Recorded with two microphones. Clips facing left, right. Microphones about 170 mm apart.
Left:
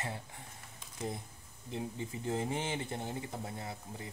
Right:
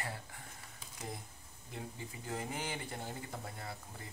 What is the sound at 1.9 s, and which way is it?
Speech, 25° left (ahead or behind).